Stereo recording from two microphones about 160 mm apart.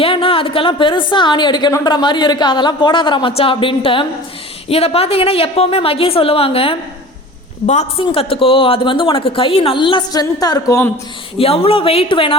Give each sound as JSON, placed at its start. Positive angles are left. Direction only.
{"t": 0.0, "sound": "a woman's voice", "side_deg": 35}
{"t": 11.3, "sound": "speech", "side_deg": 35}